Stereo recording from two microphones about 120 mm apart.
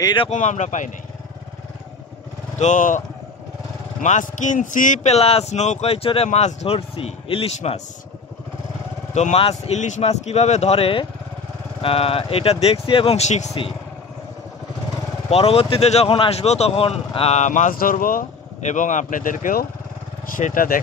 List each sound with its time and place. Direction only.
0.0 s speech: 40° left (ahead or behind)
0.3 s speech: 90° left
2.6 s speech: 90° left
4.0 s speech: 90° left; by 7.8 s 55° left (ahead or behind)
9.1 s speech: 65° left (ahead or behind)
15.2 s speech: 55° left (ahead or behind); by 19.4 s 90° left
20.4 s speech: 70° left (ahead or behind)